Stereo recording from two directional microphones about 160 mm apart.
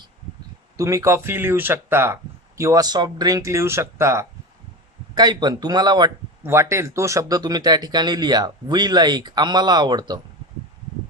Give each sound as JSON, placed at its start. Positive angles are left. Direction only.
{"t": 0.8, "sound": "a man's voice", "side_deg": -20}